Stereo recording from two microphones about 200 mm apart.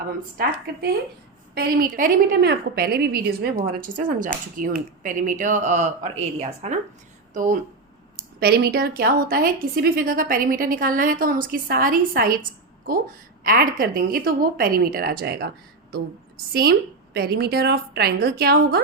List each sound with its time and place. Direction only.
1.5 s a woman's voice: 50° right (ahead or behind)
8.4 s a woman's voice: 55° right (ahead or behind)
13.4 s a woman's voice: 45° right (ahead or behind)
16.5 s a woman's voice: 50° right (ahead or behind)